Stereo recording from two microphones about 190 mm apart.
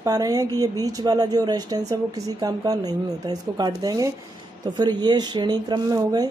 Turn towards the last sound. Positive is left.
turn(degrees=-20)  # may be behind; listen again after turning